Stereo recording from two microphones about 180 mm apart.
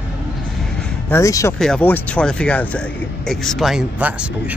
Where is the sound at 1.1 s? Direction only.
15° left (ahead or behind).